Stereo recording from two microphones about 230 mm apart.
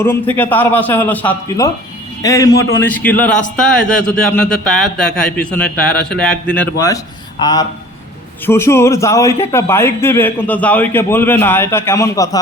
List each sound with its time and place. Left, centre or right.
0.0 s a man's voice: centre
2.6 s a man's voice: left
2.8 s a man's voice: centre